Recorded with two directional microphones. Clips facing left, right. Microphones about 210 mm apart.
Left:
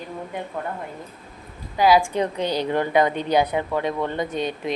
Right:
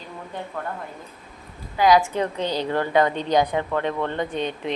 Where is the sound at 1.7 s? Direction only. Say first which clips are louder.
Even; 5° left (ahead or behind).